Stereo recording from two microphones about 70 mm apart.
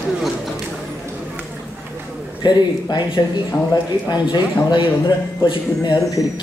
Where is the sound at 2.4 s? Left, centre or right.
Left.